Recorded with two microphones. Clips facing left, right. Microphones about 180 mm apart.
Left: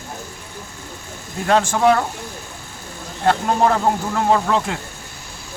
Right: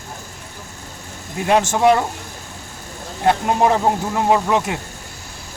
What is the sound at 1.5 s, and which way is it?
Speech, 15° right (ahead or behind).